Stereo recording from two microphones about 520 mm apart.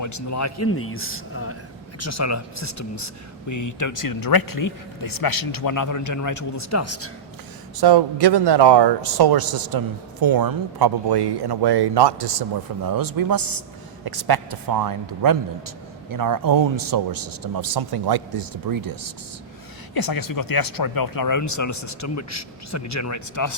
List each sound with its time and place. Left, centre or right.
0.0 s speech: left
7.8 s a man's voice: right
19.9 s speech: left